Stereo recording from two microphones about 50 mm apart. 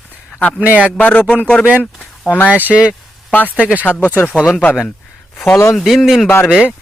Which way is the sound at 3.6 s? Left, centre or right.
Right.